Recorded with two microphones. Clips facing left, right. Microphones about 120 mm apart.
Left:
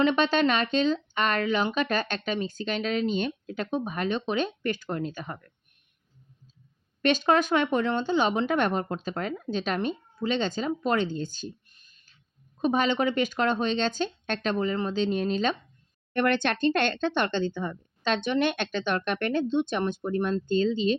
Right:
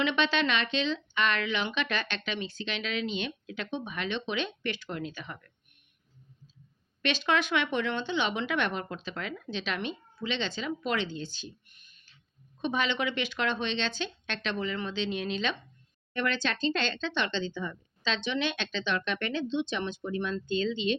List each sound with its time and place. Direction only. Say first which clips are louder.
0.0 s speech: left 5 dB; 45° left (ahead or behind)
7.0 s speech: left 6 dB; 45° left (ahead or behind)
16.1 s speech: left 6 dB; 55° left (ahead or behind); by 20.9 s 40° left (ahead or behind)